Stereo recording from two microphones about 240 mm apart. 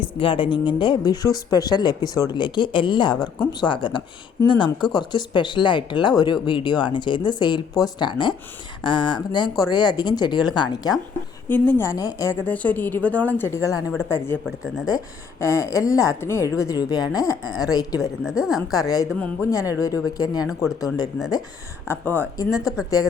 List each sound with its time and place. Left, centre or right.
0.2 s a woman's voice: left; by 14.8 s centre
14.8 s a woman's voice: centre
18.2 s a woman's voice: centre
18.9 s a woman's voice: centre